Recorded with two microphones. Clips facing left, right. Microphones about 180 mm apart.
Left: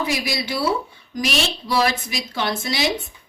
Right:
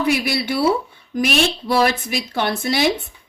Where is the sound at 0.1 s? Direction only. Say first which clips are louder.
Right 4 dB; 60° right (ahead or behind).